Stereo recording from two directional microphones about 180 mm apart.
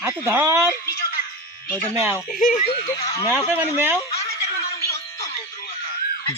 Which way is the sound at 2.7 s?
25° left (ahead or behind).